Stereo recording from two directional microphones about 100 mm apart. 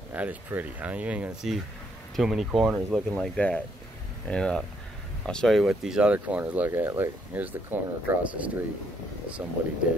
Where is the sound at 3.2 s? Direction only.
10° left (ahead or behind).